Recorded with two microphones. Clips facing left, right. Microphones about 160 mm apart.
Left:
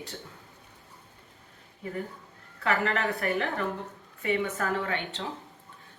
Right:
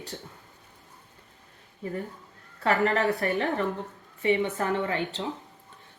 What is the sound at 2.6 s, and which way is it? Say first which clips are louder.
Speech: right 4 dB; 40° right (ahead or behind).